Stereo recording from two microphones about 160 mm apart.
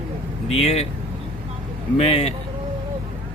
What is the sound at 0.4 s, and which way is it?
Speech, 40° left (ahead or behind).